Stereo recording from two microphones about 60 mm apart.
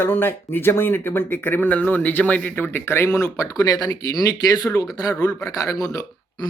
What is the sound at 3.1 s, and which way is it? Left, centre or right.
Speech, left.